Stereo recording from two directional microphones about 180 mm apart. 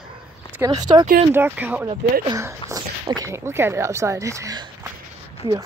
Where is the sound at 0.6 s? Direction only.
20° right (ahead or behind).